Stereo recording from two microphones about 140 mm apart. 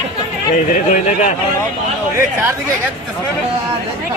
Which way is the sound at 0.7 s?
65° left (ahead or behind).